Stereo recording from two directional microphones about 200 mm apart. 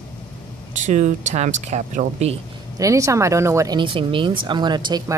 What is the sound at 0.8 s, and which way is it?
Speech, 35° right (ahead or behind).